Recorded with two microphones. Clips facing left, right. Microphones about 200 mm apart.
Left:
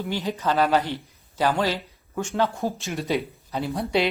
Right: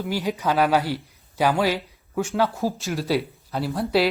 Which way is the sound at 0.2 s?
15° right (ahead or behind).